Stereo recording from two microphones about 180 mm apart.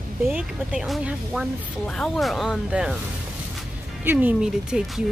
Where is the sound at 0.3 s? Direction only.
5° right (ahead or behind).